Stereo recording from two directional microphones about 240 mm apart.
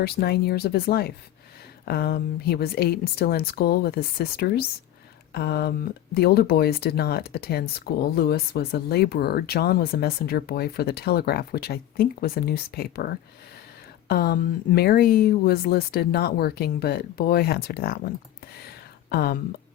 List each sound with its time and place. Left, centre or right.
0.0 s speech: left
14.1 s speech: left
19.1 s speech: left